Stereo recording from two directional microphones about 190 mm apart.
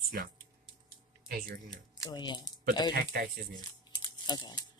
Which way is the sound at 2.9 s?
50° right (ahead or behind).